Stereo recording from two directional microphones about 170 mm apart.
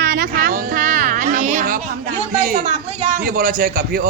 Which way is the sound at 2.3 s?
50° right (ahead or behind).